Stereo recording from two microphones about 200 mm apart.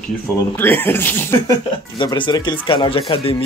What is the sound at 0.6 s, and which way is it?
Speech, 10° left (ahead or behind).